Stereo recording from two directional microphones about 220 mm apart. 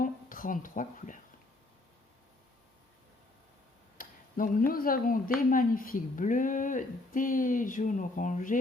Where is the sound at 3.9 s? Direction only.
40° left (ahead or behind).